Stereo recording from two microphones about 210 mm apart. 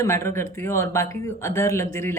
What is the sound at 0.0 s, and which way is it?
A woman's voice, 15° left (ahead or behind).